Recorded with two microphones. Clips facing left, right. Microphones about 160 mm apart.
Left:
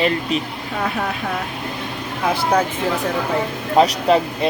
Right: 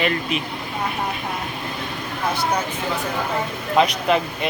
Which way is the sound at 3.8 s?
35° left (ahead or behind).